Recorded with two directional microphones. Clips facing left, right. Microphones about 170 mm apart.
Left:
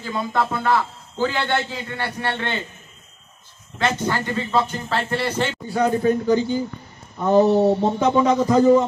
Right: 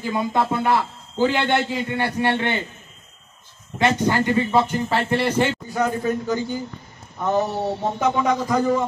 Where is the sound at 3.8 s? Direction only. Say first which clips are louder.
Right 3 dB; 15° right (ahead or behind).